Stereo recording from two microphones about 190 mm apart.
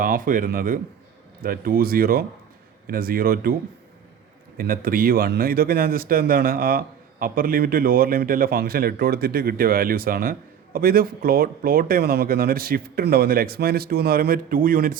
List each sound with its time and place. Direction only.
0.0 s a man's voice: 45° right (ahead or behind)
4.5 s a man's voice: 50° right (ahead or behind)